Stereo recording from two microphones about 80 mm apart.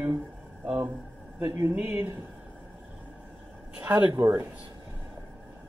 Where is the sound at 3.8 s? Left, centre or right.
Right.